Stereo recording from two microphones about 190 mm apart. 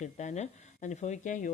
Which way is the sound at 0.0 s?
40° left (ahead or behind).